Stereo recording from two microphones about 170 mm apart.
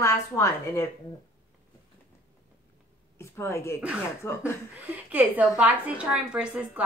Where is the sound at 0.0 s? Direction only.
15° left (ahead or behind).